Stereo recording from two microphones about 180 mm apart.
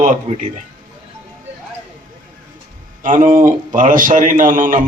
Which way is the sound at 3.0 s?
45° right (ahead or behind).